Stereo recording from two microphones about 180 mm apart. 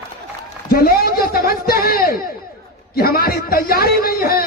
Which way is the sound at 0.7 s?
55° left (ahead or behind).